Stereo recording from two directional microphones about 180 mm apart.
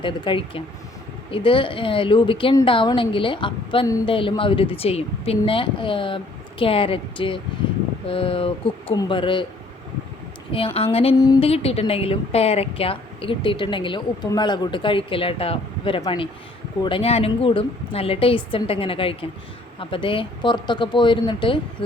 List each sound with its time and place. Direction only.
0.0 s speech: 30° left (ahead or behind)
10.8 s a woman's voice: 35° left (ahead or behind)